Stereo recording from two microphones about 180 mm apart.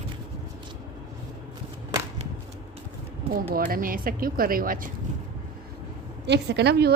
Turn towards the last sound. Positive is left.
turn(degrees=-70)  # may be behind; listen again after turning